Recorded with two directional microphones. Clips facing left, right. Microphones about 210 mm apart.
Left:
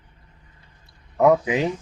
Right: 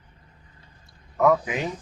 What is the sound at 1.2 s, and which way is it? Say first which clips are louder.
Speech: left 4 dB; 20° left (ahead or behind).